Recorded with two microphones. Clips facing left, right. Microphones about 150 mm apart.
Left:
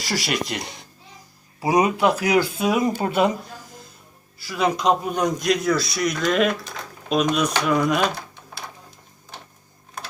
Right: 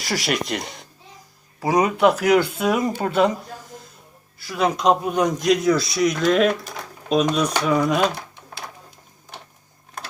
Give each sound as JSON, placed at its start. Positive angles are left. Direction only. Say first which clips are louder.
{"t": 0.1, "sound": "a man's voice", "louder": "right 2 dB", "side_deg": 5}
{"t": 1.6, "sound": "speech", "louder": "even", "side_deg": 15}
{"t": 2.3, "sound": "speech", "louder": "right 2 dB", "side_deg": 5}
{"t": 4.4, "sound": "a man's voice", "louder": "right 1 dB", "side_deg": 5}